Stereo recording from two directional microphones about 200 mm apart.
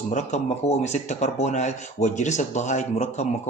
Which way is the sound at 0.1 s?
35° left (ahead or behind).